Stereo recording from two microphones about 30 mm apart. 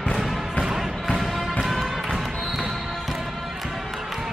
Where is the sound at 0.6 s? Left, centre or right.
Centre.